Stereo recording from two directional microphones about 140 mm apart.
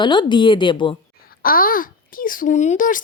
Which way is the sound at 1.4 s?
85° left.